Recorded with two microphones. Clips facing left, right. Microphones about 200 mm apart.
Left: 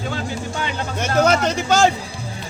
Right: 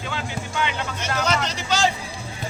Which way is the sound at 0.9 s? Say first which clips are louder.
Left 10 dB; 50° left (ahead or behind).